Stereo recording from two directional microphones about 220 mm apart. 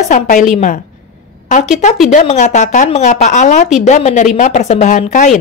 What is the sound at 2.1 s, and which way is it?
Speech, 35° left (ahead or behind).